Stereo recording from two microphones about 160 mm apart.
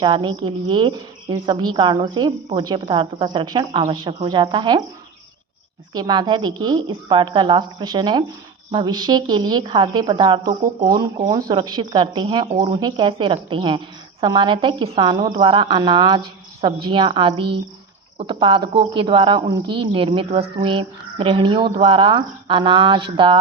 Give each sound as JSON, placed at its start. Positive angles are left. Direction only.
{"t": 0.0, "sound": "speech", "side_deg": -30}
{"t": 5.9, "sound": "a woman's voice", "side_deg": -25}